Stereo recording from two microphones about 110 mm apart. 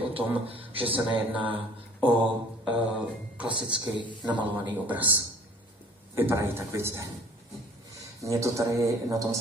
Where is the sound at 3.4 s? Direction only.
50° right (ahead or behind).